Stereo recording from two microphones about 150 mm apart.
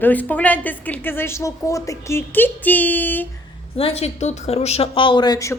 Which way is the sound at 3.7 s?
40° left (ahead or behind).